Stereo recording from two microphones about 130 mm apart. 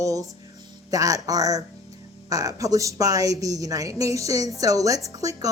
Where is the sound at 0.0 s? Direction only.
25° right (ahead or behind).